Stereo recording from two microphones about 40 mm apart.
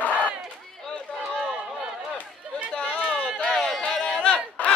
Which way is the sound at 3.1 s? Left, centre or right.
Left.